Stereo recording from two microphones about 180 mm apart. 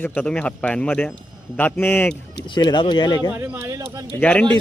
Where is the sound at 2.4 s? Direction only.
25° left (ahead or behind).